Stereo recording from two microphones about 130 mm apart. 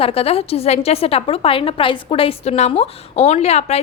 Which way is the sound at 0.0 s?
50° left (ahead or behind).